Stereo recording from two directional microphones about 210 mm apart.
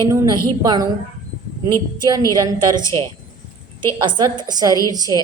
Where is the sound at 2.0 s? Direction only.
15° right (ahead or behind).